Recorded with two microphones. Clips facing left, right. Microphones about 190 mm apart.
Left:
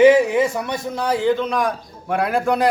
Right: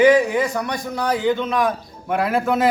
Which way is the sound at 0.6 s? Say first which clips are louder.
Left 1 dB; 25° left (ahead or behind).